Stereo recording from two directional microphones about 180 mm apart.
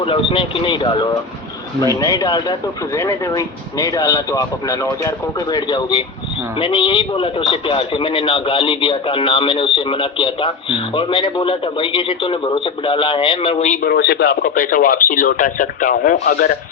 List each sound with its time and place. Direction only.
0.0 s a man's voice: 30° left (ahead or behind)
13.8 s speech: 60° left (ahead or behind)